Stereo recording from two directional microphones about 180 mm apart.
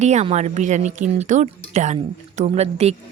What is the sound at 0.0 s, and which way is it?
Speech, 40° right (ahead or behind).